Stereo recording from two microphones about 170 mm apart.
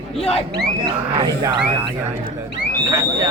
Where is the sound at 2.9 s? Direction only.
20° right (ahead or behind).